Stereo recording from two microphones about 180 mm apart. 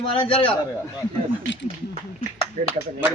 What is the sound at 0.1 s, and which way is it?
Speech, 30° left (ahead or behind).